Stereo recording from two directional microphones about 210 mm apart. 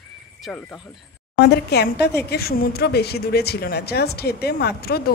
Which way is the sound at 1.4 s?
50° left (ahead or behind).